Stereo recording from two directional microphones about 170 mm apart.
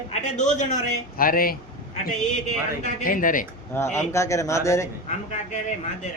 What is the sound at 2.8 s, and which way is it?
Speech, 55° left (ahead or behind).